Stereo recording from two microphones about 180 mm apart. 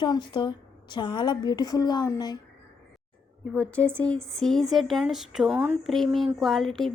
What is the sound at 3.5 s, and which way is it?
Speech, 10° left (ahead or behind).